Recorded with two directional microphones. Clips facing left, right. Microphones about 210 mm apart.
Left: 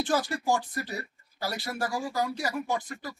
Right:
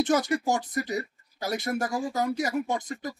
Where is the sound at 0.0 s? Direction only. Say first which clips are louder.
Right 4 dB; 20° right (ahead or behind).